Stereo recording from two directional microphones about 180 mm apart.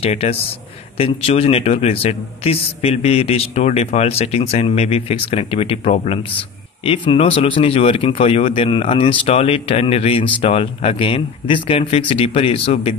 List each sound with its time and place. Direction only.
0.0 s a man's voice: 35° left (ahead or behind)